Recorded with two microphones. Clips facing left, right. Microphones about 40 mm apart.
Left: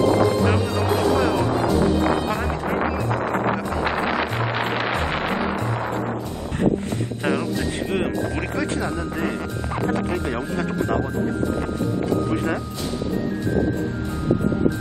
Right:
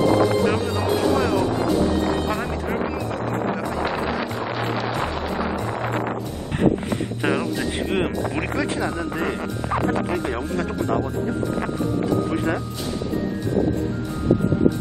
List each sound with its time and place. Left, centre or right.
0.5 s music: centre
2.8 s music: left
4.4 s music: left
7.9 s speech: centre
10.1 s speech: centre
10.8 s speech: centre
12.3 s speech: centre